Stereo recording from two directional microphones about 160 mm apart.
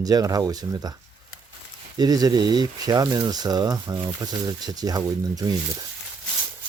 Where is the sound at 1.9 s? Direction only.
25° right (ahead or behind).